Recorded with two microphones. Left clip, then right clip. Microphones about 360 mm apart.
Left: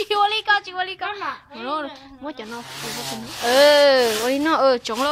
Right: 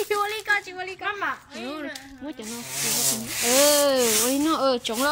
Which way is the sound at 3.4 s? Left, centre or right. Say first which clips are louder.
Left 6 dB; left.